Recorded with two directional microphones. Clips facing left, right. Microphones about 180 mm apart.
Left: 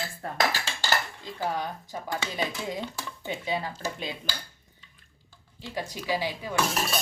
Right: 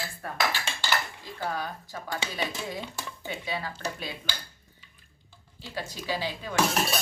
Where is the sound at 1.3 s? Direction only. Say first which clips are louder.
Left 2 dB; 15° left (ahead or behind).